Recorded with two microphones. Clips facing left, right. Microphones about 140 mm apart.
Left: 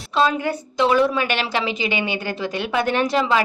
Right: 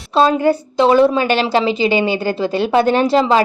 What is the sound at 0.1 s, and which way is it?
A woman's voice, 35° right (ahead or behind).